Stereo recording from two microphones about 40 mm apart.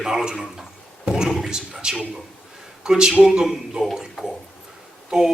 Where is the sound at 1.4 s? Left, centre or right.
Centre.